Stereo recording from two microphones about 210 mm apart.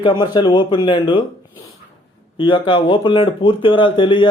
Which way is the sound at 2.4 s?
25° left (ahead or behind).